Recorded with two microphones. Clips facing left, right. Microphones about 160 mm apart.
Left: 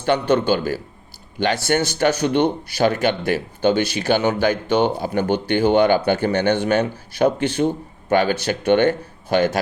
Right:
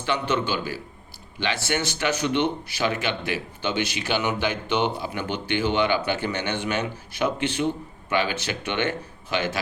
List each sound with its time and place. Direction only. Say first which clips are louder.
0.0 s speech: left 7 dB; 45° left (ahead or behind)